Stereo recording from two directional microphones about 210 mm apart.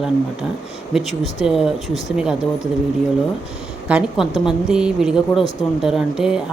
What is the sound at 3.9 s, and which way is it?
Speech, 5° right (ahead or behind).